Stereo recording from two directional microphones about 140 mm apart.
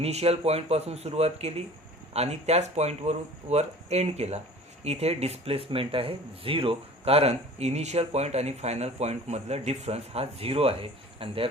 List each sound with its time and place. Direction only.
0.0 s speech: 45° right (ahead or behind)